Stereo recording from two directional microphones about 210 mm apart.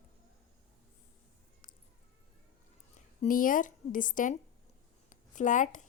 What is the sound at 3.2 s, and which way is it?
A woman's voice, 40° left (ahead or behind).